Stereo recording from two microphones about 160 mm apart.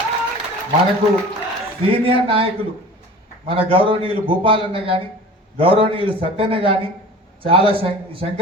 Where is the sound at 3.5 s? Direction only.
35° right (ahead or behind).